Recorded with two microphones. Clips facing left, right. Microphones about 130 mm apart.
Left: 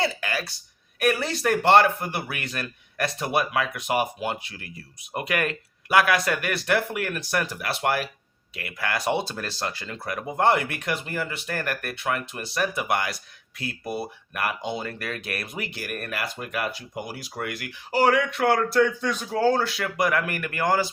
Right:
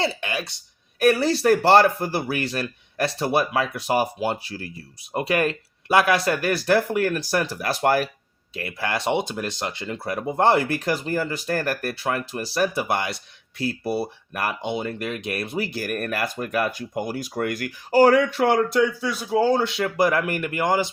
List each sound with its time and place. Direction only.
0.0 s speech: 25° right (ahead or behind)
0.9 s speech: 35° right (ahead or behind)
14.7 s speech: 25° right (ahead or behind)